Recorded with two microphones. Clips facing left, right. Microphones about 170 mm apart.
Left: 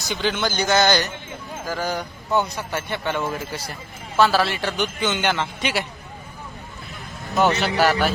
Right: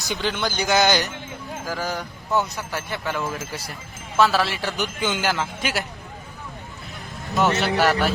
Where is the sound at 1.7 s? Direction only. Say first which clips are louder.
Left 2 dB; centre (ahead or behind).